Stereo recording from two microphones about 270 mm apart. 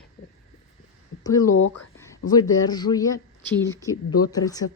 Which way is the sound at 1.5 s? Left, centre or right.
Left.